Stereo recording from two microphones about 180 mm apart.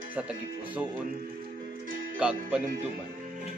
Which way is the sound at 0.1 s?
10° right (ahead or behind).